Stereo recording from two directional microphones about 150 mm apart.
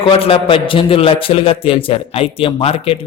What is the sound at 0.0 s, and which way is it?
Speech, 40° left (ahead or behind).